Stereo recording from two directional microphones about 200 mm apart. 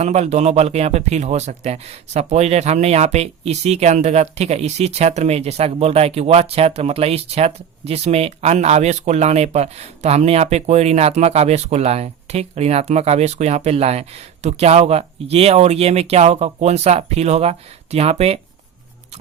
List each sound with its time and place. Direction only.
0.0 s speech: 35° right (ahead or behind)